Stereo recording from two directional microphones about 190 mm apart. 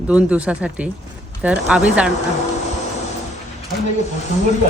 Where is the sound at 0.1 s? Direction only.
5° right (ahead or behind).